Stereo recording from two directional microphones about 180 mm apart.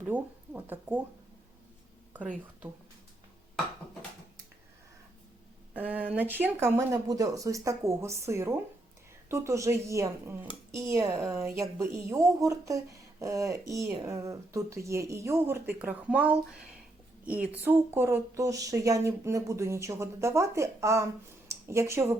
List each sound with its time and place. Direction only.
0.0 s speech: 10° right (ahead or behind)
5.7 s a woman's voice: 10° right (ahead or behind)